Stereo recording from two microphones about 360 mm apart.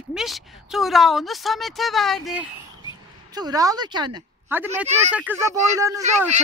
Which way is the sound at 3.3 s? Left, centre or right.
Centre.